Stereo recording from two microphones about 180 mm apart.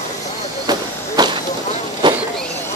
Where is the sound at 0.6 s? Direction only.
25° right (ahead or behind).